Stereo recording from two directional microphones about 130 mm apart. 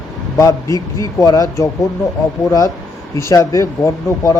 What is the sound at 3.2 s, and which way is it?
Speech, 25° left (ahead or behind).